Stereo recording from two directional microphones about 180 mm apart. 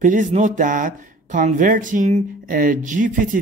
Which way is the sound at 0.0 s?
45° right (ahead or behind).